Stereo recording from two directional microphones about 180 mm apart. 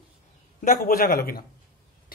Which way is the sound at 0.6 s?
45° left (ahead or behind).